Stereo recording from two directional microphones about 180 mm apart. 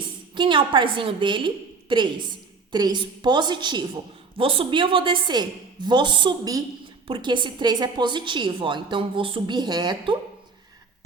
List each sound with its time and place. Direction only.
0.3 s a woman's voice: 25° right (ahead or behind)